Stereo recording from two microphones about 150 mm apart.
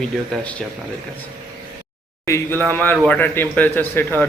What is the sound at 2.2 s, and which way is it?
Speech, 15° left (ahead or behind).